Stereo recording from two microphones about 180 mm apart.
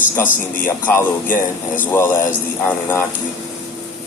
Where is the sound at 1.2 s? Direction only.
50° left (ahead or behind).